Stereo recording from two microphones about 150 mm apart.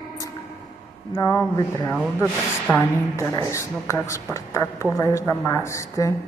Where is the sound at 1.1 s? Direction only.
20° left (ahead or behind).